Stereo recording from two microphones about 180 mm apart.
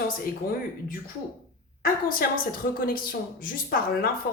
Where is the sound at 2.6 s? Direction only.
65° left (ahead or behind).